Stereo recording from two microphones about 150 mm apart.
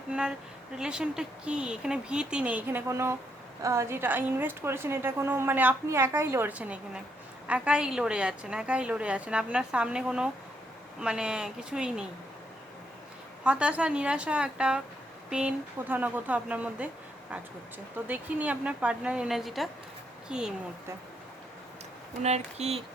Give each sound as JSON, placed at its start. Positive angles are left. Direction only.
{"t": 0.1, "sound": "a woman's voice", "side_deg": -5}
{"t": 13.4, "sound": "a woman's voice", "side_deg": -10}
{"t": 17.9, "sound": "a woman's voice", "side_deg": -10}
{"t": 22.2, "sound": "speech", "side_deg": -45}